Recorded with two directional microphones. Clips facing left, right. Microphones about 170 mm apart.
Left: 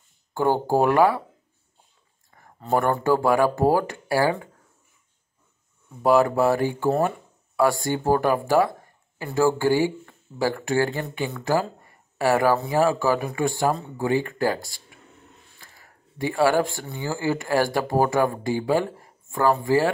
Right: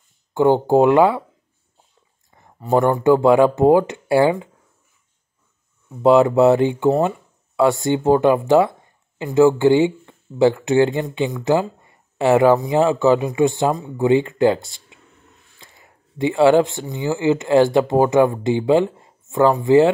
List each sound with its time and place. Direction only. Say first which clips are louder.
0.3 s speech: right 7 dB; 20° right (ahead or behind)
2.3 s speech: right 5 dB; 20° right (ahead or behind)
6.0 s speech: right 6 dB; 25° right (ahead or behind)